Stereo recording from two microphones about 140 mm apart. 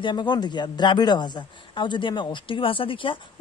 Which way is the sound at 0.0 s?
30° left (ahead or behind).